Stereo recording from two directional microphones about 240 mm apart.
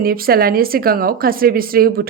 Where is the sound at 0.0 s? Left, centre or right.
Right.